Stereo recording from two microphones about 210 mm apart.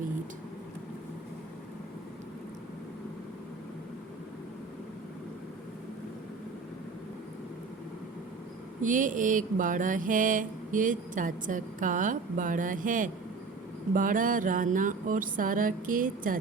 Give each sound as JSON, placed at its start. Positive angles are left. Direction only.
{"t": 8.8, "sound": "mantra", "side_deg": -40}